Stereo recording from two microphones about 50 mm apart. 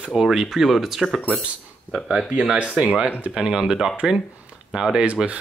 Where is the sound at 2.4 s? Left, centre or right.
Centre.